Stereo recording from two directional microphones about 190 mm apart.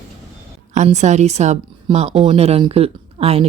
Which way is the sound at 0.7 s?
40° right (ahead or behind).